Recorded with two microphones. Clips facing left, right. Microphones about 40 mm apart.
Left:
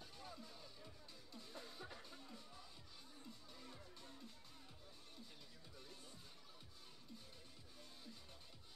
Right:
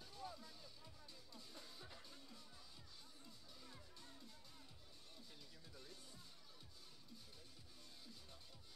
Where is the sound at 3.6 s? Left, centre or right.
Centre.